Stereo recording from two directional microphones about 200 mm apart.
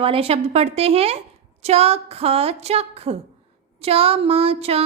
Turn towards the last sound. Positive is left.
turn(degrees=-30)  # may be behind; listen again after turning